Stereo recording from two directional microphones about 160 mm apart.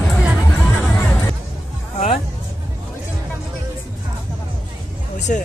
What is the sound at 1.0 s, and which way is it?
Hubbub, 15° left (ahead or behind).